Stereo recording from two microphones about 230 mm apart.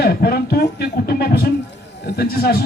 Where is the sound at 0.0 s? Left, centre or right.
Left.